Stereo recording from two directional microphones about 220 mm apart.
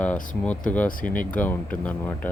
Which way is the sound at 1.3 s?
5° left (ahead or behind).